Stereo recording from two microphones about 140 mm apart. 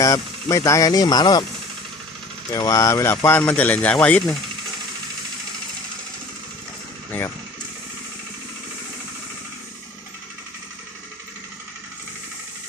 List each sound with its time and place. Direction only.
0.0 s speech: 25° left (ahead or behind)
2.5 s speech: 25° left (ahead or behind)